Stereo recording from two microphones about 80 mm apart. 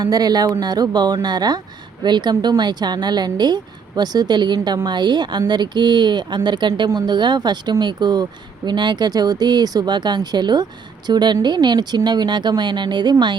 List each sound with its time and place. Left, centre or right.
0.0 s speech: right